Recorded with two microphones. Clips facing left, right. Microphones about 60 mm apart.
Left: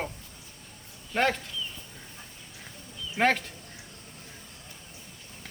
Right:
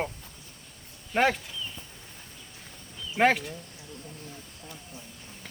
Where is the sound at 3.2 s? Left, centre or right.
Centre.